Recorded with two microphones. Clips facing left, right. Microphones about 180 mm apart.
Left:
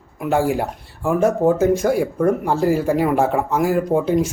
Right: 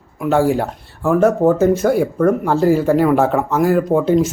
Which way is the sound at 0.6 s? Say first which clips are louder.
Right 3 dB; 10° left (ahead or behind).